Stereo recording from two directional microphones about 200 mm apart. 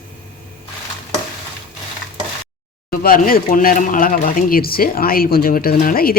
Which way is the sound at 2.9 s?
45° left (ahead or behind).